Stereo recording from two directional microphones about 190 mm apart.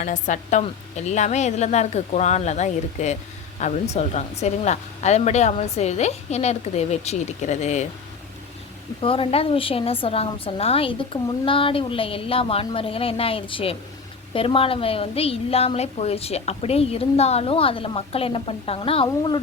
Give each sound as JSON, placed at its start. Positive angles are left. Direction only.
{"t": 0.0, "sound": "a woman's voice", "side_deg": 40}
{"t": 9.0, "sound": "a woman's voice", "side_deg": 30}